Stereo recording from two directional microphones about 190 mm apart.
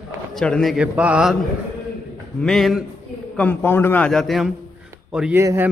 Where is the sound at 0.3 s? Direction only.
Centre (ahead or behind).